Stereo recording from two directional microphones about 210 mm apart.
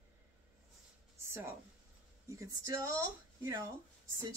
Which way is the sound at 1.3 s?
10° right (ahead or behind).